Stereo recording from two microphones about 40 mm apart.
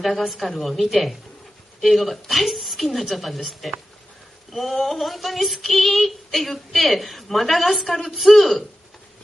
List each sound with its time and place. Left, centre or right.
0.0 s female singing: centre